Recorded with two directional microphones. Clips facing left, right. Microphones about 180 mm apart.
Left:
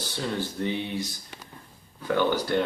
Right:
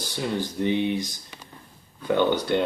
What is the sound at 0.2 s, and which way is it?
Speech, 15° right (ahead or behind).